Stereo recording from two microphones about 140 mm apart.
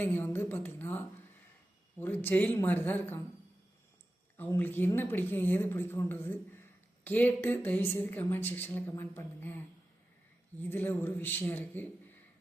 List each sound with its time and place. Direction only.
0.0 s speech: 15° left (ahead or behind)
4.4 s speech: 15° left (ahead or behind)